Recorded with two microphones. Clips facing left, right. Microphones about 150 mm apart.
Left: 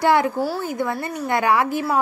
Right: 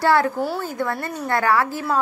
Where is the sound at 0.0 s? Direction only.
15° left (ahead or behind).